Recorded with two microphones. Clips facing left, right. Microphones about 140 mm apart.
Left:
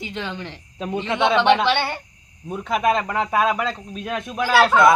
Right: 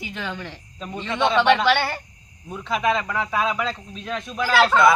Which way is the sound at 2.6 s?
45° left (ahead or behind).